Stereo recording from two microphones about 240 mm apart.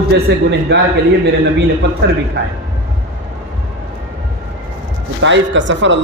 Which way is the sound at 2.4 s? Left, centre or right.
Right.